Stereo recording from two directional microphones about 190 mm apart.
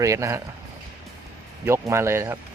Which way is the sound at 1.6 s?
15° right (ahead or behind).